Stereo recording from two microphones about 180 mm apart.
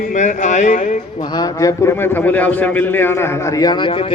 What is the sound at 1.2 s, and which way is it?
A man's voice, 20° left (ahead or behind).